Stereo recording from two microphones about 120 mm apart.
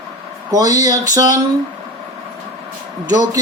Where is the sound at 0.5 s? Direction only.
30° right (ahead or behind).